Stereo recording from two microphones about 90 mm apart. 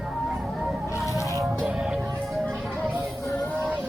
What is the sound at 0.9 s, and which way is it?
Music, 35° left (ahead or behind).